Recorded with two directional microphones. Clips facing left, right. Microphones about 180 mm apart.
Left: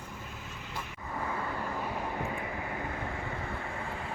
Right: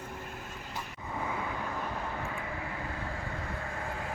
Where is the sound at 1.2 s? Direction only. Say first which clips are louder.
Even; 5° right (ahead or behind).